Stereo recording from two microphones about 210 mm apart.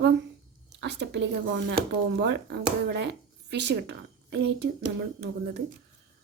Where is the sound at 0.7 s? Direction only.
55° right (ahead or behind).